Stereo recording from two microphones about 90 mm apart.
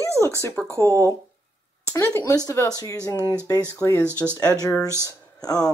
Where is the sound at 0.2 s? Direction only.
30° left (ahead or behind).